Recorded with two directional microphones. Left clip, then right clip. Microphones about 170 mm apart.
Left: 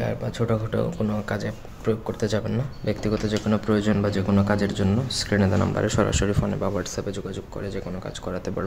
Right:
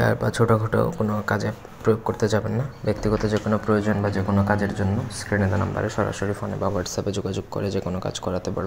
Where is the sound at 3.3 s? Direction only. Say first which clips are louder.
Right 2 dB; 20° left (ahead or behind).